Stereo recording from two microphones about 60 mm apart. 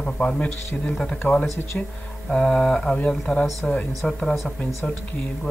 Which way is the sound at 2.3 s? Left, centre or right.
Centre.